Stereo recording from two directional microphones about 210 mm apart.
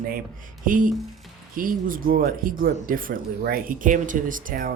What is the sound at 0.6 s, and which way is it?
Speech, 40° right (ahead or behind).